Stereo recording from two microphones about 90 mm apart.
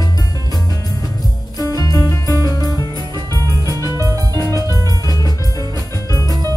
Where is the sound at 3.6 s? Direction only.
40° right (ahead or behind).